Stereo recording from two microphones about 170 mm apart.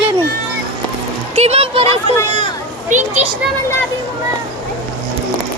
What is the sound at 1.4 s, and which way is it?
Speech, 40° right (ahead or behind).